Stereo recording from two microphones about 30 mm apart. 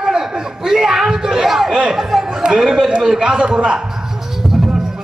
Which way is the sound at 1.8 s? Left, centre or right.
Centre.